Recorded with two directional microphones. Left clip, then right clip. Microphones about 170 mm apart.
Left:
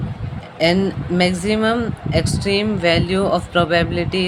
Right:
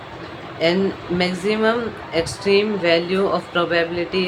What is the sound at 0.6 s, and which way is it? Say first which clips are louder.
Speech: left 2 dB; 70° left (ahead or behind).